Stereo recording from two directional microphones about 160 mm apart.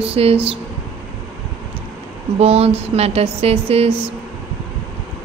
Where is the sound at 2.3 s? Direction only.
40° right (ahead or behind).